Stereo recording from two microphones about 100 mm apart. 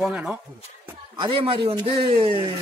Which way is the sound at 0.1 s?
10° right (ahead or behind).